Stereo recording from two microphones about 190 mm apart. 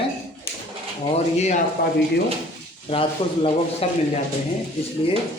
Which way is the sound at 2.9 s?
30° left (ahead or behind).